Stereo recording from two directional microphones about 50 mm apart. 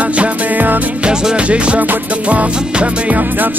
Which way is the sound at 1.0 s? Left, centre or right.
Centre.